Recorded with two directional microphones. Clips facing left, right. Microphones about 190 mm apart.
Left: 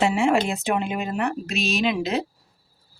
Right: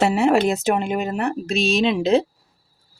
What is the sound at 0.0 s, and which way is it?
A woman's voice, 40° right (ahead or behind).